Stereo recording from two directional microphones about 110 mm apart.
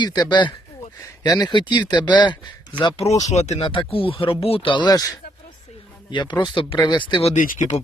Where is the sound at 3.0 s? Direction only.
90° left.